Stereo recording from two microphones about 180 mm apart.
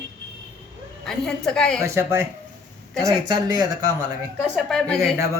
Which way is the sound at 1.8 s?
15° right (ahead or behind).